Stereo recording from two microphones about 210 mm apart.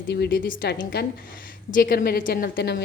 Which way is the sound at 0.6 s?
50° left (ahead or behind).